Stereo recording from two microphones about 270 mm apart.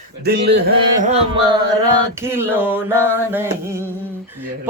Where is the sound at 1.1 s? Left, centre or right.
Centre.